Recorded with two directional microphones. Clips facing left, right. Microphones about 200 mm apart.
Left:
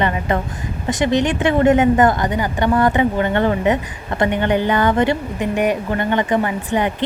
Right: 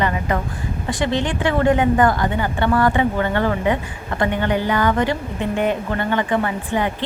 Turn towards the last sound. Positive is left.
turn(degrees=20)  # may be behind; listen again after turning